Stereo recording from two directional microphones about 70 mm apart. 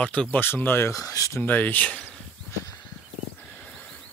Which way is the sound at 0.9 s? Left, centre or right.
Left.